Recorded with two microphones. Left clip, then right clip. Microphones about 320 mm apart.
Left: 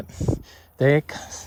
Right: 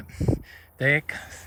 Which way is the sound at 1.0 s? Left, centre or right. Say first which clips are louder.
Even; centre.